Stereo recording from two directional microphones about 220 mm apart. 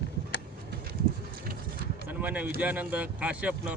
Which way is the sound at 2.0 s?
5° right (ahead or behind).